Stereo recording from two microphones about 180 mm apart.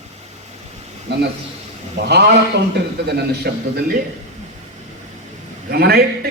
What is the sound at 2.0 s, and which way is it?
A man's voice, 70° right (ahead or behind).